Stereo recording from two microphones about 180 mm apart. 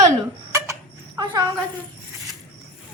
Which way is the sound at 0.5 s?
15° right (ahead or behind).